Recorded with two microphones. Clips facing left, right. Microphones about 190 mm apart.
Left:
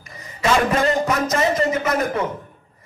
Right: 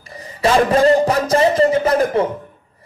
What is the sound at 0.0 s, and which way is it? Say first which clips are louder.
A man's voice: right 5 dB; 30° right (ahead or behind).